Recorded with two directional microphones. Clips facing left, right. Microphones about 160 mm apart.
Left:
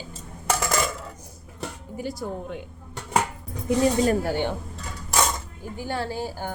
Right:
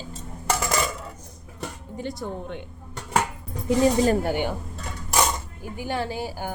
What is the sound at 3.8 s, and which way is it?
Speech, 25° right (ahead or behind).